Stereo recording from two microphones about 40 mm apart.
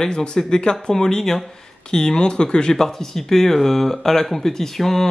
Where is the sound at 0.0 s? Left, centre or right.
Left.